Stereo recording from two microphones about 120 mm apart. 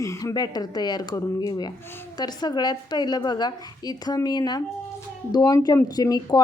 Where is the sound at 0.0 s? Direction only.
25° left (ahead or behind).